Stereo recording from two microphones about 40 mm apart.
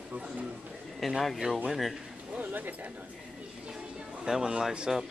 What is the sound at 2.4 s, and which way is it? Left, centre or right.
Speech, right.